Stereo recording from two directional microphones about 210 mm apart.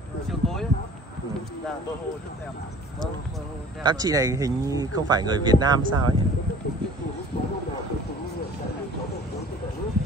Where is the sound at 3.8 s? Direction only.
20° right (ahead or behind).